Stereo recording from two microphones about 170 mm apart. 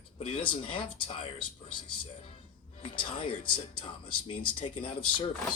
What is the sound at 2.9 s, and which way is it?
Speech, 30° left (ahead or behind).